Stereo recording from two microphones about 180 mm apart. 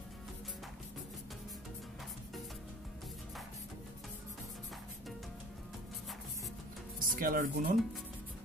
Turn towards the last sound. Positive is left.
turn(degrees=-50)  # may be behind; listen again after turning